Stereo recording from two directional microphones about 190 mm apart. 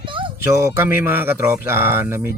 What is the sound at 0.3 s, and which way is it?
Speech, 15° right (ahead or behind).